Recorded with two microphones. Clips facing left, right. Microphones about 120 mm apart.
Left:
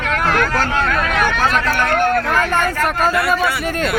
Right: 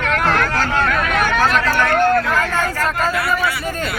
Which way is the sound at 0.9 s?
5° right (ahead or behind).